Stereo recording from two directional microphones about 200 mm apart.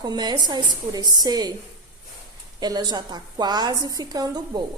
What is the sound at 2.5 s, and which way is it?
A woman's voice, 20° right (ahead or behind).